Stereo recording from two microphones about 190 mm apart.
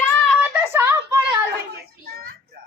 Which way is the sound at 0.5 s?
10° right (ahead or behind).